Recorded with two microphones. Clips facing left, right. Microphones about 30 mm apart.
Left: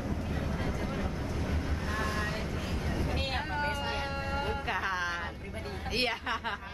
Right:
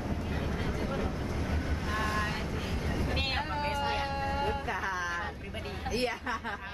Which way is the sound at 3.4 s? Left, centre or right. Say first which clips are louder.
Right 1 dB; centre.